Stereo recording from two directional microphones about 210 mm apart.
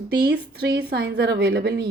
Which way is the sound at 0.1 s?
50° right (ahead or behind).